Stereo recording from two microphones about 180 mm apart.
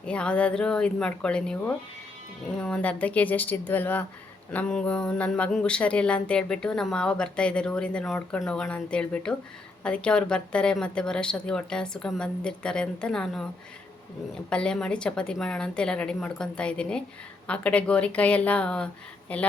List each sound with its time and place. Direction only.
0.0 s speech: 5° left (ahead or behind)
14.5 s speech: 5° left (ahead or behind)